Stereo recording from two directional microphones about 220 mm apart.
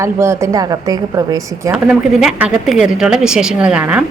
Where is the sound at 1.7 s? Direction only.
5° right (ahead or behind).